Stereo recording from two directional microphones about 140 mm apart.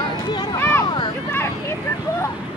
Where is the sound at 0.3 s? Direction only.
30° left (ahead or behind).